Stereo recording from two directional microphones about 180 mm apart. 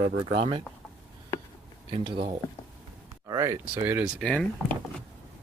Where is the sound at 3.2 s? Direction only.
15° right (ahead or behind).